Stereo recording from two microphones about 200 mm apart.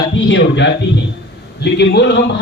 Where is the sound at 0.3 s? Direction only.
60° left (ahead or behind).